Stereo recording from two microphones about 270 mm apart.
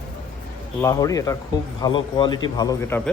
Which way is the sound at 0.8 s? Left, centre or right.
Centre.